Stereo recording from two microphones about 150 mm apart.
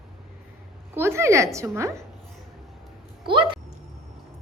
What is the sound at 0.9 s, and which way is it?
A woman's voice, 15° right (ahead or behind).